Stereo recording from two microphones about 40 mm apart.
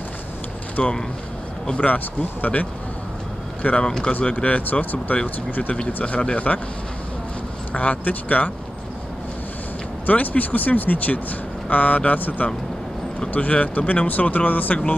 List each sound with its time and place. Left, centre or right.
0.8 s speech: left
2.4 s speech: left
3.8 s speech: centre
4.2 s speech: left
7.7 s speech: left
10.0 s speech: left